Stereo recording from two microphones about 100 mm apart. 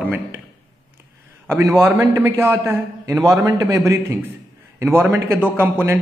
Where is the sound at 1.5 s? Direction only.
25° right (ahead or behind).